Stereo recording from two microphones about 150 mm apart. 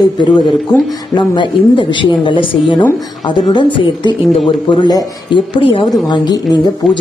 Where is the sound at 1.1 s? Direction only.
30° left (ahead or behind).